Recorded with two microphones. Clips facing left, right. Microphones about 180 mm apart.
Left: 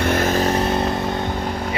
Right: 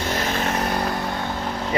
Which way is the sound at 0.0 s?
55° left (ahead or behind).